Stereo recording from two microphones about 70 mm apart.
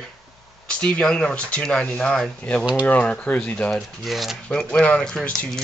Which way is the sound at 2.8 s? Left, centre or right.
Left.